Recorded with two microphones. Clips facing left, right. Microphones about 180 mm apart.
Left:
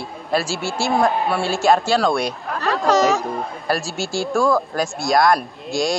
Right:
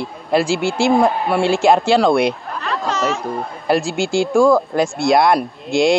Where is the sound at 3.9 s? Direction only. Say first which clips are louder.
Right 6 dB; 15° right (ahead or behind).